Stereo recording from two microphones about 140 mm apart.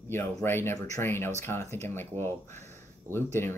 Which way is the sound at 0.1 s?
15° left (ahead or behind).